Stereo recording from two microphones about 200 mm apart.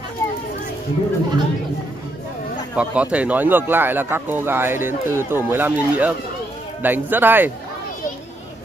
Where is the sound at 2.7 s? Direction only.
5° right (ahead or behind).